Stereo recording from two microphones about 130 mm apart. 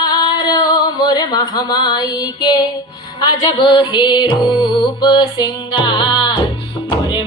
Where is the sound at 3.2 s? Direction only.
35° left (ahead or behind).